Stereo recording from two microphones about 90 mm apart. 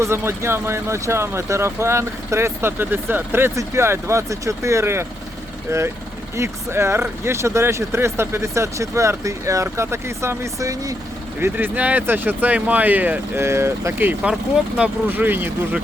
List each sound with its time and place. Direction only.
0.0 s speech: 30° right (ahead or behind)
11.3 s speech: 25° right (ahead or behind)
14.3 s speech: 10° right (ahead or behind)
15.1 s speech: 20° right (ahead or behind)